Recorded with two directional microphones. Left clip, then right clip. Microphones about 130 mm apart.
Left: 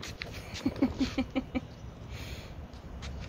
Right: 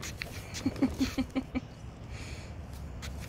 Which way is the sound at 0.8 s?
35° left (ahead or behind).